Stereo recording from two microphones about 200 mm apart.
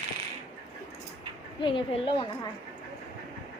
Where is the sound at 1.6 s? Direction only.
25° left (ahead or behind).